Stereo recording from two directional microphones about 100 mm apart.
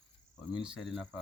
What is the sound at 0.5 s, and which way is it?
Speech, 5° right (ahead or behind).